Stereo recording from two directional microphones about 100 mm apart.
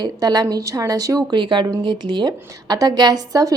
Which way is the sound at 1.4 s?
50° right (ahead or behind).